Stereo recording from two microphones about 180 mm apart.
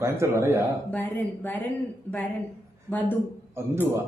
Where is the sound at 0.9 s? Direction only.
10° left (ahead or behind).